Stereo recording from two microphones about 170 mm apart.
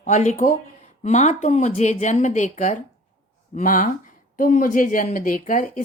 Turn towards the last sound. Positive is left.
turn(degrees=50)  # may be behind; listen again after turning